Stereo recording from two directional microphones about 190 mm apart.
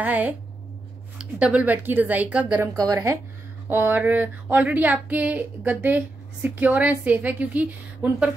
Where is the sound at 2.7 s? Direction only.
20° right (ahead or behind).